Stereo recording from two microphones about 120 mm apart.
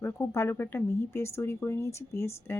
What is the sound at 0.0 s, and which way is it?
A woman's voice, 20° left (ahead or behind).